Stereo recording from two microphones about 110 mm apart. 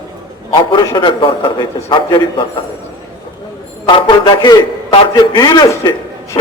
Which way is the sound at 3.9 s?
45° left (ahead or behind).